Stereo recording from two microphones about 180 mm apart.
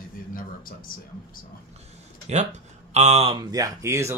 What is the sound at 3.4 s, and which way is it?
Speech, 20° right (ahead or behind).